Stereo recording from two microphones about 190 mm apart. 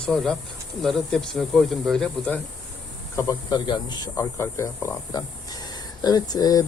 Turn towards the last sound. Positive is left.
turn(degrees=20)  # may be behind; listen again after turning